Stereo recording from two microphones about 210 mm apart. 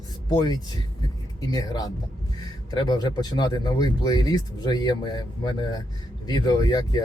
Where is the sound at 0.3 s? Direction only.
20° left (ahead or behind).